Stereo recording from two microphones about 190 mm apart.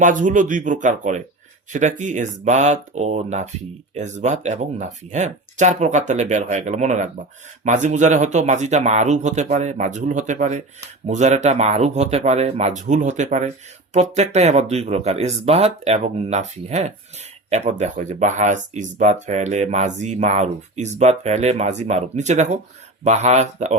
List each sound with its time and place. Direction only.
0.0 s speech: 40° right (ahead or behind)